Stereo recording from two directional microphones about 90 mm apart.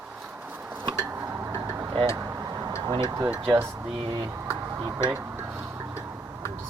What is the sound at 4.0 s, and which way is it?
Speech, 60° right (ahead or behind).